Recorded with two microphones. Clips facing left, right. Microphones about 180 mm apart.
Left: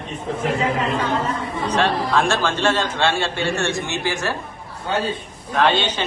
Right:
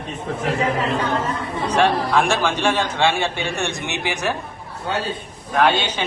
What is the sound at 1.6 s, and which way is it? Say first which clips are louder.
A man's voice: right 2 dB; 10° right (ahead or behind).